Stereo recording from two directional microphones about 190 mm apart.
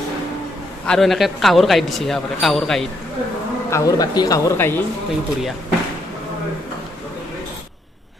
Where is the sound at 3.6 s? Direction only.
15° left (ahead or behind).